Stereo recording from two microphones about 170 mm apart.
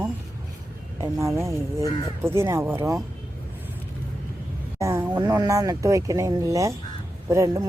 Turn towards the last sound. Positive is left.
turn(degrees=-20)  # may be behind; listen again after turning